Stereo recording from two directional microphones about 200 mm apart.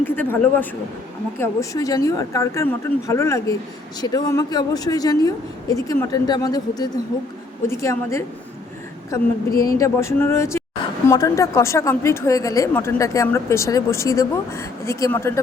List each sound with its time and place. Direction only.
0.0 s a woman's voice: 10° left (ahead or behind)